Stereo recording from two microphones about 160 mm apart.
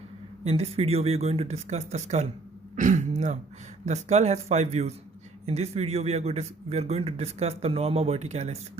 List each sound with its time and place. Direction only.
0.4 s a man's voice: 40° right (ahead or behind)